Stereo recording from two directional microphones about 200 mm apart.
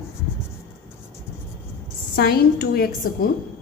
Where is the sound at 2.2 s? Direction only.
50° left (ahead or behind).